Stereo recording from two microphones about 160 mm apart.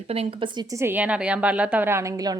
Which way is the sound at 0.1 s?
35° right (ahead or behind).